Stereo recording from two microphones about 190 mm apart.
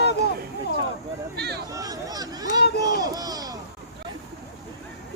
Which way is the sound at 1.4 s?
60° right (ahead or behind).